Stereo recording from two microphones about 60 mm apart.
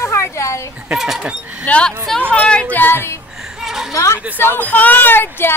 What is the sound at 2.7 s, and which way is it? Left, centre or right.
Speech, left.